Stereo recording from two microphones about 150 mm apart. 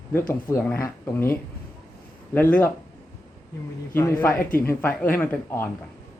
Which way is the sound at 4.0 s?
15° left (ahead or behind).